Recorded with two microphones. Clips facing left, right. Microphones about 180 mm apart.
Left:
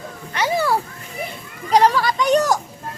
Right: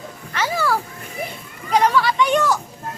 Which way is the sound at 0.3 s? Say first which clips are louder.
Left 2 dB; 20° left (ahead or behind).